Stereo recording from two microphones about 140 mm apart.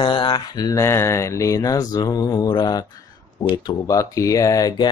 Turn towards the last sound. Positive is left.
turn(degrees=25)  # may be behind; listen again after turning